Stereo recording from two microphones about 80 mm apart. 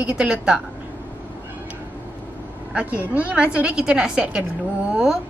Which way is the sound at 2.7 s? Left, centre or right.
Centre.